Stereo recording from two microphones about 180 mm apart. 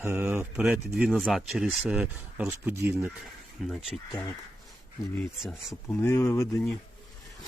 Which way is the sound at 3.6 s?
5° left (ahead or behind).